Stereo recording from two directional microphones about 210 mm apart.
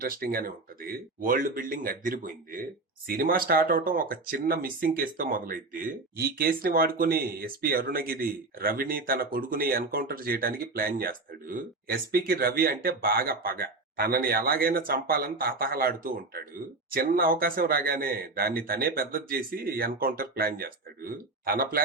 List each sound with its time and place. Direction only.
0.0 s speech: 45° right (ahead or behind)